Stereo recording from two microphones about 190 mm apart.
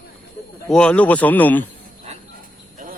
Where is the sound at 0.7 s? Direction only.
5° left (ahead or behind).